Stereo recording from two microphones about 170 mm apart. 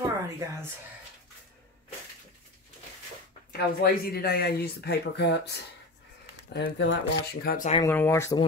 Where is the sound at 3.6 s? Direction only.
65° left (ahead or behind).